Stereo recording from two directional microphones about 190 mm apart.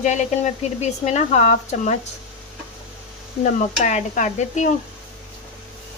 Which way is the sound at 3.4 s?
40° left (ahead or behind).